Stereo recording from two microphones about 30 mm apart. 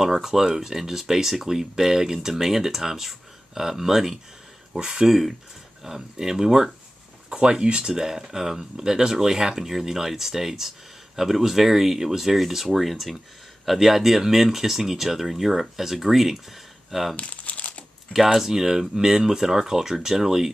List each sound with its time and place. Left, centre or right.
0.0 s speech: centre
4.7 s speech: right
5.9 s speech: centre
7.2 s speech: right; by 16.3 s centre
17.2 s crumpling: left
18.1 s speech: centre